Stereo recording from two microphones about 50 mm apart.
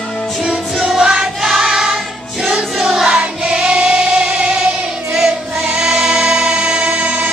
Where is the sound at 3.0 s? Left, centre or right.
Right.